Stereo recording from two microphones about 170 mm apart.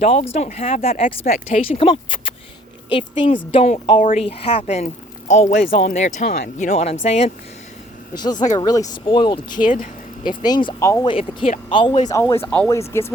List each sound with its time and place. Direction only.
0.0 s speech: 40° left (ahead or behind)
1.0 s speech: 55° left (ahead or behind)
1.5 s speech: 40° left (ahead or behind)
8.1 s speech: 25° left (ahead or behind)